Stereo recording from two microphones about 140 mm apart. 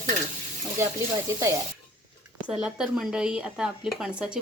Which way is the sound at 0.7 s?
20° right (ahead or behind).